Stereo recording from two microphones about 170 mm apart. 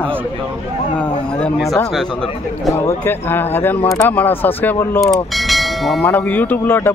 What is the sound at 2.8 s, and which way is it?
Speech, 15° left (ahead or behind).